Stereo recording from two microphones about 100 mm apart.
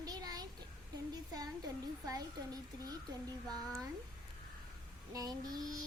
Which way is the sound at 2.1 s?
40° right (ahead or behind).